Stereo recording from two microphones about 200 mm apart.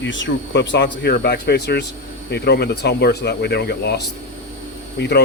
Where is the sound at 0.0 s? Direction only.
65° left (ahead or behind).